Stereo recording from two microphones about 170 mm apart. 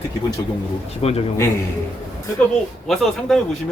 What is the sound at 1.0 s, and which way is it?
Speech, 35° left (ahead or behind).